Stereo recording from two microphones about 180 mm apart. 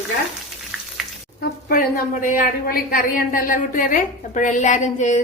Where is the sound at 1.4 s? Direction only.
50° left (ahead or behind).